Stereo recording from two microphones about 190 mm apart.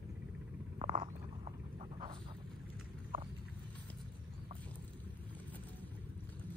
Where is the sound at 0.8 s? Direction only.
25° right (ahead or behind).